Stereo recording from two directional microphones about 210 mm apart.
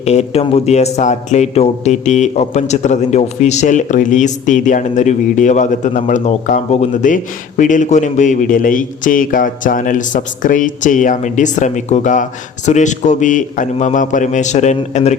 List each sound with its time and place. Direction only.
0.0 s a man's voice: 30° left (ahead or behind)